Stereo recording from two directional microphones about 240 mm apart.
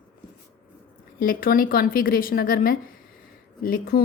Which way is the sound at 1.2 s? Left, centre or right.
Left.